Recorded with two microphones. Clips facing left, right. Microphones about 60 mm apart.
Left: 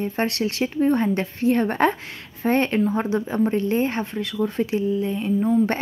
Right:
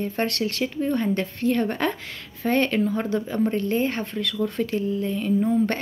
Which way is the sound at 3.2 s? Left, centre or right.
Left.